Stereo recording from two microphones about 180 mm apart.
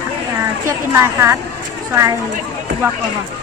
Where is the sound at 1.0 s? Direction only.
15° right (ahead or behind).